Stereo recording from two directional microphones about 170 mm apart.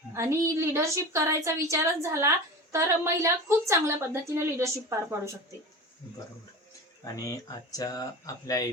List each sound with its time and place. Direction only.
0.1 s a woman's voice: 15° right (ahead or behind)
7.0 s speech: 20° left (ahead or behind)